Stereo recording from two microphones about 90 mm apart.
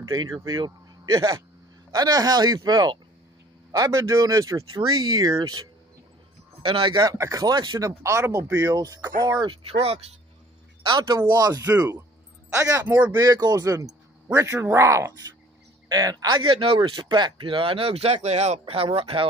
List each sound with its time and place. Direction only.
0.1 s a man's voice: 40° right (ahead or behind)
6.6 s a man's voice: 70° right (ahead or behind)
7.1 s a man's voice: 40° right (ahead or behind)
8.0 s a man's voice: 30° right (ahead or behind)
9.4 s speech: 75° right (ahead or behind)
10.8 s a man's voice: 55° right (ahead or behind)
11.1 s speech: 45° right (ahead or behind)
12.5 s a man's voice: 35° right (ahead or behind)
12.8 s speech: 20° right (ahead or behind)
13.2 s a man's voice: 45° right (ahead or behind)
15.9 s speech: 45° right (ahead or behind); by 19.2 s 85° right